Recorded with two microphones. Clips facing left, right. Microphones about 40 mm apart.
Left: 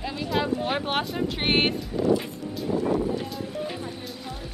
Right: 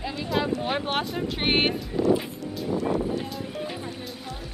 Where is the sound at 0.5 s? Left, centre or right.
Centre.